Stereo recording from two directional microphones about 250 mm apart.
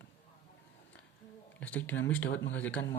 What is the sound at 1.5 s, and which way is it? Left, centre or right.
Speech, centre.